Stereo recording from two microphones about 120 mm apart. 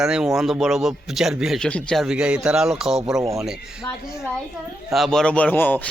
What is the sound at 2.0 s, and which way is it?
A man's voice, 10° right (ahead or behind).